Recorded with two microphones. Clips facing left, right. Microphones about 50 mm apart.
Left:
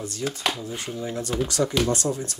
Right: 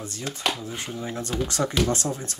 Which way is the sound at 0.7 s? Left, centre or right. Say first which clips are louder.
Left 1 dB; right.